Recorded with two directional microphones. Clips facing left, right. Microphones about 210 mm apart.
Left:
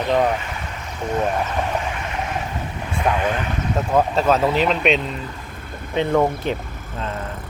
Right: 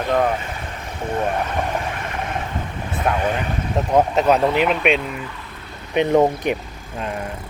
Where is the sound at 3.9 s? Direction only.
15° right (ahead or behind).